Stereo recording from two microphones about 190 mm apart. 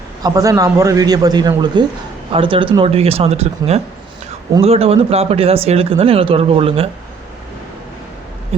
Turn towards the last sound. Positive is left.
turn(degrees=-30)  # may be behind; listen again after turning